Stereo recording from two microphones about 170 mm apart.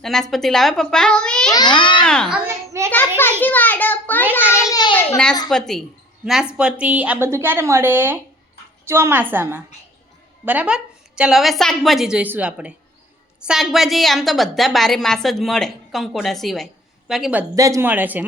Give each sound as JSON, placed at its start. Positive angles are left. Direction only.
{"t": 0.0, "sound": "a woman's voice", "side_deg": 0}
{"t": 1.5, "sound": "speech", "side_deg": 25}
{"t": 2.0, "sound": "a woman's voice", "side_deg": 5}
{"t": 2.5, "sound": "a sound", "side_deg": -15}
{"t": 3.4, "sound": "a sound", "side_deg": 10}
{"t": 4.7, "sound": "a child's voice", "side_deg": 25}
{"t": 5.5, "sound": "a woman's voice", "side_deg": 0}
{"t": 17.5, "sound": "a woman's voice", "side_deg": -20}